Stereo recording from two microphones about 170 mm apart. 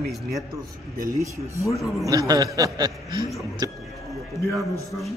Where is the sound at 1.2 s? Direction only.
20° right (ahead or behind).